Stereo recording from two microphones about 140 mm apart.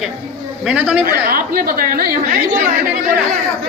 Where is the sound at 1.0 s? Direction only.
90° right.